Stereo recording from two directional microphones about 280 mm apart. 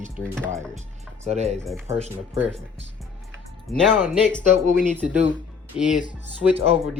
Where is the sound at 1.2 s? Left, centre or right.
Right.